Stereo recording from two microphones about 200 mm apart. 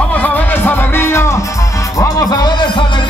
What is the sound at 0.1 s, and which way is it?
Music, 10° left (ahead or behind).